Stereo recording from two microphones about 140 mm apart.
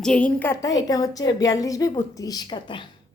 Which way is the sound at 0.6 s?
25° left (ahead or behind).